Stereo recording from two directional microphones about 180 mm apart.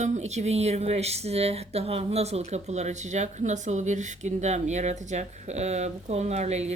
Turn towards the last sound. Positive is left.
turn(degrees=-40)  # may be behind; listen again after turning